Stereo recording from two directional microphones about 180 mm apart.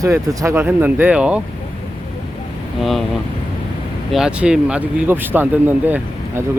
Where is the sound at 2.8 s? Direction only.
Centre (ahead or behind).